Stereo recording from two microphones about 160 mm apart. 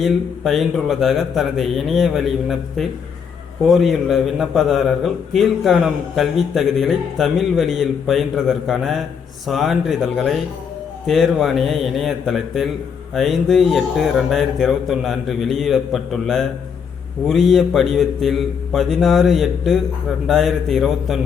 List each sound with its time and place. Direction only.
0.0 s a man's voice: centre (ahead or behind)